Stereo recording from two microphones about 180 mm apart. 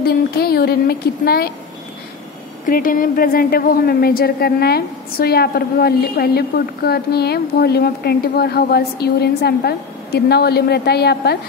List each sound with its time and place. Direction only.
0.0 s a woman's voice: 60° left (ahead or behind)
2.6 s a woman's voice: 50° left (ahead or behind); by 11.3 s 65° left (ahead or behind)